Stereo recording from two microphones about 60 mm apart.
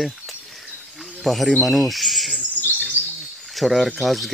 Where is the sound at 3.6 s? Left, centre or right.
Centre.